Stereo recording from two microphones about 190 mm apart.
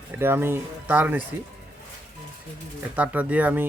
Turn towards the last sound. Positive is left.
turn(degrees=-10)  # may be behind; listen again after turning